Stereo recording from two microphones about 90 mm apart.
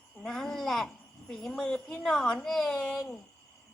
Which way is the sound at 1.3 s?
5° left (ahead or behind).